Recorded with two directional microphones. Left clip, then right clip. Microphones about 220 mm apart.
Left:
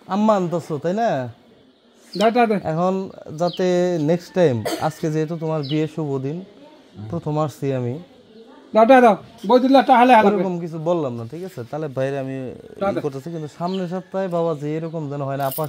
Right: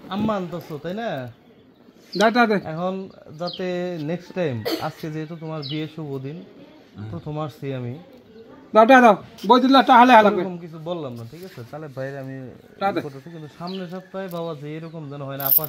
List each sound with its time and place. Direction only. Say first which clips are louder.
0.1 s speech: left 7 dB; 55° left (ahead or behind)
2.1 s a man's voice: left 1 dB; centre (ahead or behind)
2.6 s speech: left 6 dB; 55° left (ahead or behind)
8.7 s a man's voice: even; 5° right (ahead or behind)
10.4 s speech: left 7 dB; 55° left (ahead or behind)
12.7 s speech: left 1 dB; 10° right (ahead or behind)
13.0 s speech: left 9 dB; 55° left (ahead or behind)